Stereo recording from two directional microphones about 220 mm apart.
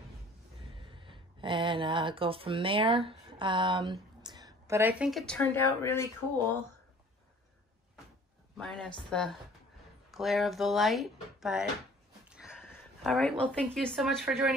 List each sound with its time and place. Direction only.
0.7 s speech: 25° right (ahead or behind); by 6.0 s 10° left (ahead or behind)
8.5 s speech: 5° left (ahead or behind)
12.3 s sniff: 5° right (ahead or behind)
12.6 s a sound: 5° left (ahead or behind)
13.6 s speech: 5° left (ahead or behind)